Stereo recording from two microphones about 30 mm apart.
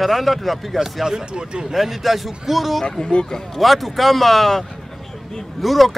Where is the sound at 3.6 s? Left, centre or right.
Centre.